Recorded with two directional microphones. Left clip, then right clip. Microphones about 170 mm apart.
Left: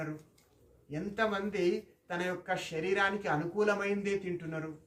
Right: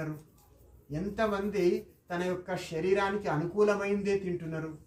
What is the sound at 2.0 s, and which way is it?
Speech, 15° left (ahead or behind).